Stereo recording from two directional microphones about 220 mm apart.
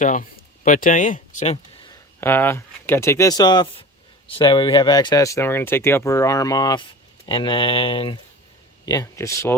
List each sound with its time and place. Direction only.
0.0 s speech: 35° left (ahead or behind)
1.9 s speech: 10° left (ahead or behind)